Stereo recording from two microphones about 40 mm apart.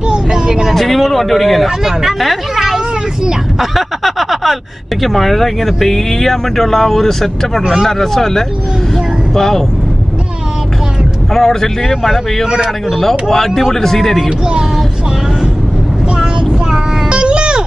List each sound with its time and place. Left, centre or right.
0.1 s vehicle: centre
0.7 s speech: centre
1.9 s speech: centre
11.3 s speech: centre
16.7 s child singing: right